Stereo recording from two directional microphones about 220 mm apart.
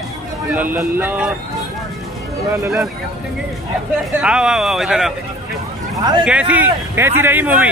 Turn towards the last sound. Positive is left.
turn(degrees=-5)  # may be behind; listen again after turning